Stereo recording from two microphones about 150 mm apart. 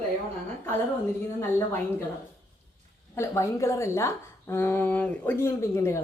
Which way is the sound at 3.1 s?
20° left (ahead or behind).